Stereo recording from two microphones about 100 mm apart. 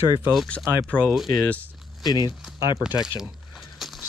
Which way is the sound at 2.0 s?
45° left (ahead or behind).